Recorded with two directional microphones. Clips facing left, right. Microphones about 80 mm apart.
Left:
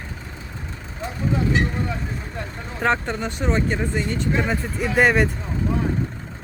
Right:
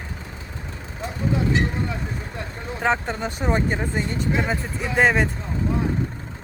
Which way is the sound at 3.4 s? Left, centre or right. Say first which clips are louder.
Even; centre.